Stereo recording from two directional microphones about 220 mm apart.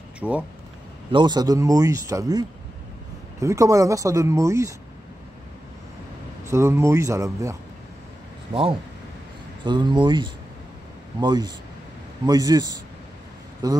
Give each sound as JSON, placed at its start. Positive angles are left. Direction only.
{"t": 0.2, "sound": "speech", "side_deg": -5}
{"t": 1.1, "sound": "speech", "side_deg": -20}
{"t": 6.4, "sound": "speech", "side_deg": -10}
{"t": 8.5, "sound": "speech", "side_deg": -30}
{"t": 9.7, "sound": "speech", "side_deg": -20}